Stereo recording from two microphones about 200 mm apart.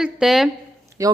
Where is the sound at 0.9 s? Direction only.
15° right (ahead or behind).